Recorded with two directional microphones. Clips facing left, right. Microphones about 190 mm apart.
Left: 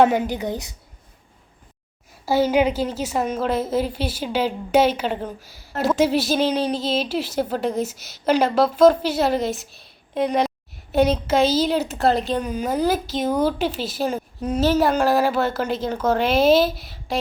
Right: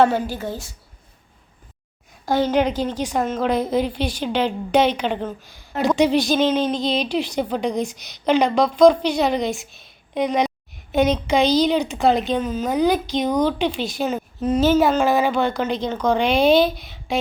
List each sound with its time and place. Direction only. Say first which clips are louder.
0.0 s a woman's voice: left 1 dB; 15° left (ahead or behind)
2.2 s a woman's voice: left 1 dB; 10° left (ahead or behind)
12.5 s a woman's voice: right 3 dB; 10° left (ahead or behind)